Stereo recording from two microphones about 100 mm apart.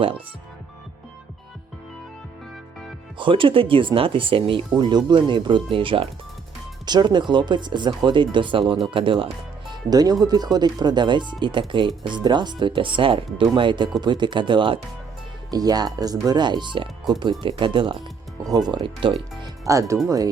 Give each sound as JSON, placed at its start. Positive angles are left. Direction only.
{"t": 3.2, "sound": "speech", "side_deg": -55}
{"t": 4.8, "sound": "speech", "side_deg": -45}
{"t": 6.8, "sound": "speech", "side_deg": -45}
{"t": 15.4, "sound": "speech", "side_deg": -40}
{"t": 18.4, "sound": "speech", "side_deg": -40}
{"t": 18.8, "sound": "speech", "side_deg": -60}
{"t": 19.7, "sound": "speech", "side_deg": -30}